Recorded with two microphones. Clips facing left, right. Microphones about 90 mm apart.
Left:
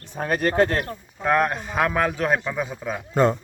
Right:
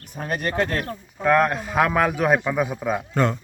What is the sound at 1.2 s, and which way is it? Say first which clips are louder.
A man's voice: right 2 dB; 5° left (ahead or behind).